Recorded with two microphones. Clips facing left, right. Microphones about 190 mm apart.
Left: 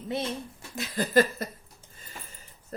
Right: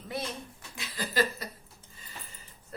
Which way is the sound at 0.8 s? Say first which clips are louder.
Left 7 dB; 50° left (ahead or behind).